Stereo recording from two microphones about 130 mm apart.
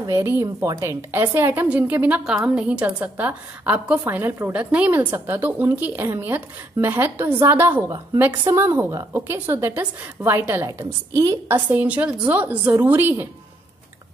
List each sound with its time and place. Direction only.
0.0 s speech: 20° right (ahead or behind)